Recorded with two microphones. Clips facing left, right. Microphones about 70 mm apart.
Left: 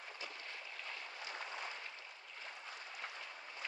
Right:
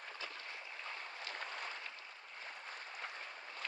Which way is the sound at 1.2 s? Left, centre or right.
Right.